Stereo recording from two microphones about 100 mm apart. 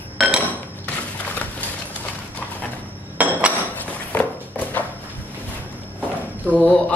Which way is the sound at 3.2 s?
15° right (ahead or behind).